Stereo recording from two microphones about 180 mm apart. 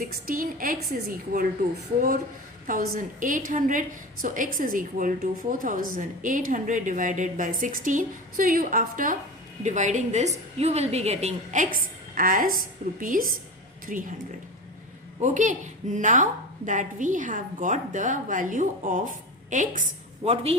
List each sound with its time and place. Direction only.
0.0 s a woman's voice: 50° right (ahead or behind)
2.6 s a woman's voice: 50° right (ahead or behind)
15.2 s a woman's voice: 45° right (ahead or behind)
20.2 s a woman's voice: 35° right (ahead or behind)